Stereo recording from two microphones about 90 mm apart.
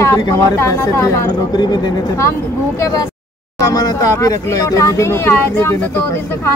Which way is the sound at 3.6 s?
45° left (ahead or behind).